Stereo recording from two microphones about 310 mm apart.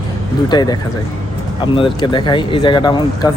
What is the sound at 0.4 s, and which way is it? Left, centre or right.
Speech, centre.